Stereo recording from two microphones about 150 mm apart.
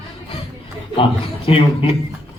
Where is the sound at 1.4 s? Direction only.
35° left (ahead or behind).